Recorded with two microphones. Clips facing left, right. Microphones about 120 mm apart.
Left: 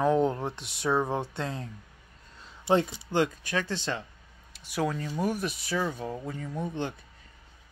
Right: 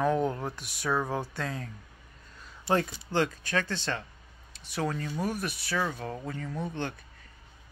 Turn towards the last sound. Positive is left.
turn(degrees=15)  # may be behind; listen again after turning